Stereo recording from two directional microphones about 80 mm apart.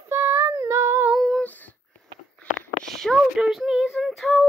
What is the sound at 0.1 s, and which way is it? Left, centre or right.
Child singing, right.